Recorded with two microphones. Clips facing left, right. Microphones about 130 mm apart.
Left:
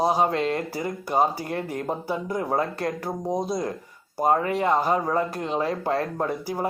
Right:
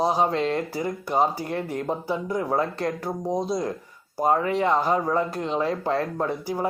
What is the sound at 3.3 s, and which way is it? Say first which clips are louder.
Speech: right 1 dB; 15° left (ahead or behind).